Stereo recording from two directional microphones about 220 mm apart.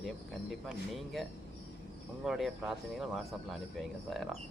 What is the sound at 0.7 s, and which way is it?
Speech, centre (ahead or behind).